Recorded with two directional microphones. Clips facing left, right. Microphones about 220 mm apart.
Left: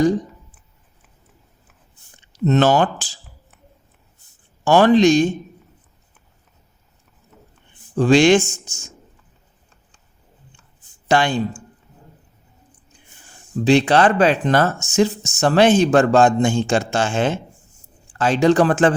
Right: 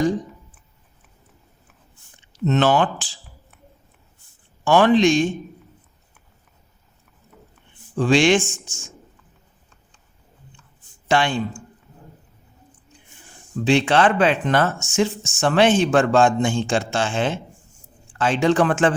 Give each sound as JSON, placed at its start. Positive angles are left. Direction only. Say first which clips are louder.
{"t": 2.5, "sound": "speech", "louder": "left 3 dB", "side_deg": 40}
{"t": 4.6, "sound": "speech", "louder": "left 3 dB", "side_deg": 40}
{"t": 7.9, "sound": "speech", "louder": "left 4 dB", "side_deg": 40}
{"t": 11.1, "sound": "speech", "louder": "left 2 dB", "side_deg": 40}
{"t": 13.6, "sound": "speech", "louder": "left 3 dB", "side_deg": 40}